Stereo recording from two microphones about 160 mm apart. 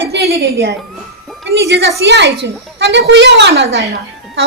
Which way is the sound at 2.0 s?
90° right.